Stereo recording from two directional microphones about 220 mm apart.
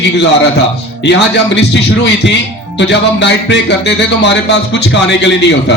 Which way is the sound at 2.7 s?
55° left (ahead or behind).